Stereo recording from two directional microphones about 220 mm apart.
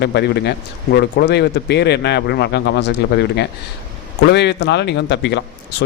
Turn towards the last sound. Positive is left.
turn(degrees=50)  # may be behind; listen again after turning